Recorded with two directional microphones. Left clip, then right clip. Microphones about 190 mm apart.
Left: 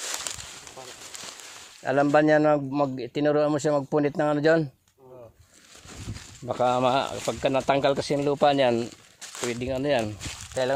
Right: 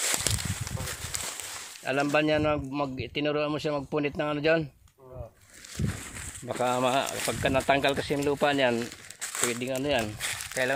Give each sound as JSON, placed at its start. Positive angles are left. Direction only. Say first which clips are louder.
{"t": 0.0, "sound": "a sound", "louder": "right 4 dB", "side_deg": -55}
{"t": 1.8, "sound": "a man's voice", "louder": "left 5 dB", "side_deg": 40}
{"t": 6.6, "sound": "a man's voice", "louder": "left 3 dB", "side_deg": 40}
{"t": 9.2, "sound": "crumpling", "louder": "right 2 dB", "side_deg": -45}
{"t": 9.5, "sound": "a man's voice", "louder": "left 4 dB", "side_deg": 40}
{"t": 10.2, "sound": "crumpling", "louder": "right 5 dB", "side_deg": -50}